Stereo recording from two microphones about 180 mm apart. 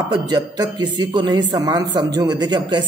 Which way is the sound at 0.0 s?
20° right (ahead or behind).